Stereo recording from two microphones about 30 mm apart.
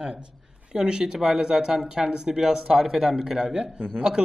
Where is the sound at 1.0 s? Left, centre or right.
Centre.